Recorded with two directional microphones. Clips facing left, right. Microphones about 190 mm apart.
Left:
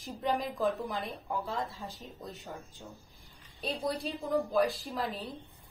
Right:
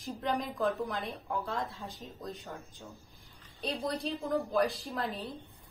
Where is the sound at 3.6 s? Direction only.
Centre (ahead or behind).